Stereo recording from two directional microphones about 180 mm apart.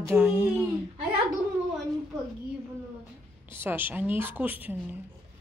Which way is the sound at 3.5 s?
10° right (ahead or behind).